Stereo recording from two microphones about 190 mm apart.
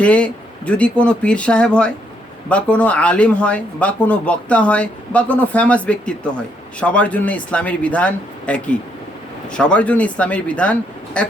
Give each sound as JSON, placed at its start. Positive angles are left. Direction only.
{"t": 0.0, "sound": "speech", "side_deg": 5}